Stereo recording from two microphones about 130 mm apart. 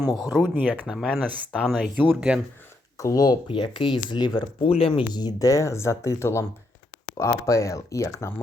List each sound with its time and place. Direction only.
0.5 s speech: 10° right (ahead or behind)
3.0 s speech: 25° left (ahead or behind)
3.4 s speech: 40° left (ahead or behind)
5.1 s speech: 30° left (ahead or behind)